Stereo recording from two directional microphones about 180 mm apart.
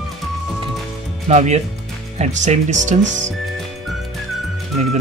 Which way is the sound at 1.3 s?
40° right (ahead or behind).